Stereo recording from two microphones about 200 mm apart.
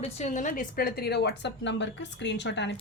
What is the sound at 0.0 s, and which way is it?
A woman's voice, 35° left (ahead or behind).